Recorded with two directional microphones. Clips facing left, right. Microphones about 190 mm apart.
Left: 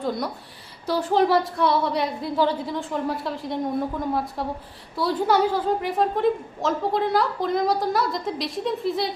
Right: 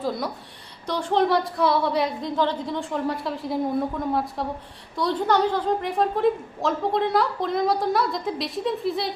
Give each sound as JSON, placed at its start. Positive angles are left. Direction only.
{"t": 0.9, "sound": "a woman's voice", "side_deg": 5}